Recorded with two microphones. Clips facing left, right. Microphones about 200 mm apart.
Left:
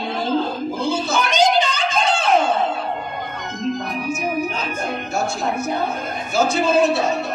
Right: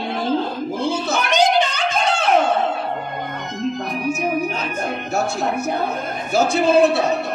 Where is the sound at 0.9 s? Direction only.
65° right (ahead or behind).